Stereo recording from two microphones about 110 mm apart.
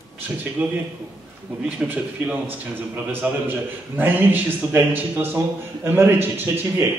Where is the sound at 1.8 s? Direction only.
10° right (ahead or behind).